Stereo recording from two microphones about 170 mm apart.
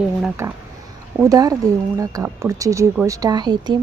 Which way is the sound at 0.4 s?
15° right (ahead or behind).